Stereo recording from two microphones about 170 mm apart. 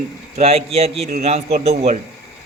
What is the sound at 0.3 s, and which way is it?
A man's voice, 35° right (ahead or behind).